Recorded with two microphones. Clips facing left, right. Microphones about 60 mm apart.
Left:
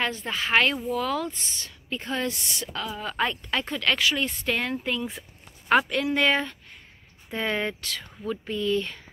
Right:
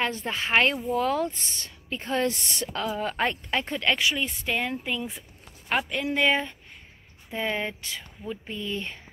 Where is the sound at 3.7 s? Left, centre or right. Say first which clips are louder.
Left 1 dB; centre.